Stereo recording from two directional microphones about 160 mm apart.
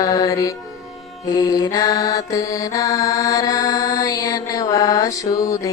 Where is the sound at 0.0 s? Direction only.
20° left (ahead or behind).